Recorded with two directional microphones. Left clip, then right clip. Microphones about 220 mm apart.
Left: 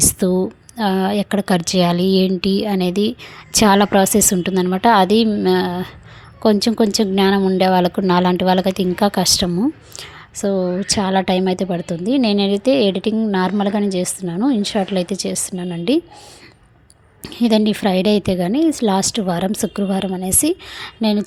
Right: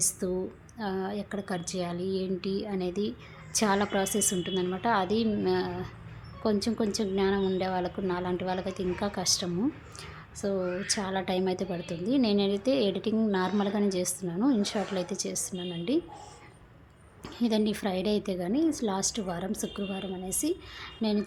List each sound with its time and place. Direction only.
0.0 s a woman's voice: 35° left (ahead or behind)
17.2 s a woman's voice: 30° left (ahead or behind)